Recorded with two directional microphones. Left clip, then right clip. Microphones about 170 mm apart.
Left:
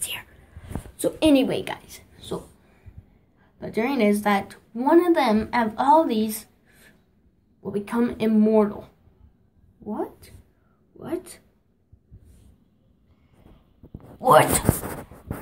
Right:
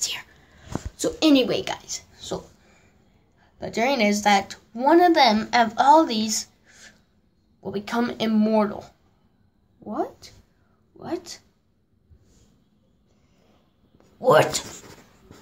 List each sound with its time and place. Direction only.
0.0 s whispering: 15° right (ahead or behind)
0.9 s a woman's voice: 10° right (ahead or behind)
14.2 s speech: 10° right (ahead or behind)